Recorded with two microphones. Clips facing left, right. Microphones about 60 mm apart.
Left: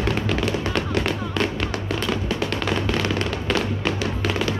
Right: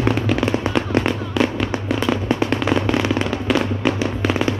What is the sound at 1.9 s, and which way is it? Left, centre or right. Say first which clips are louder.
Music: right 6 dB; centre.